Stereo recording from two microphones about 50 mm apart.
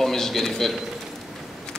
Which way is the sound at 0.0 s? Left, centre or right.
Centre.